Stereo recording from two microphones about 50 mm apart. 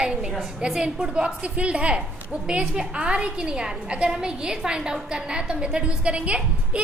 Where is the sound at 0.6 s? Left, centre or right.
Centre.